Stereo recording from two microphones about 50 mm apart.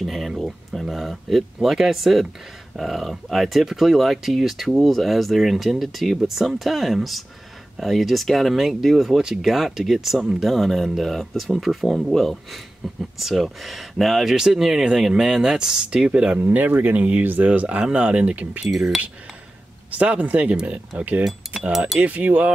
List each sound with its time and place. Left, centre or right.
0.0 s a sound: centre
0.7 s speech: centre
16.3 s speech: right
17.5 s speech: right
18.7 s speech: centre
19.9 s speech: right
21.2 s speech: centre
22.0 s speech: right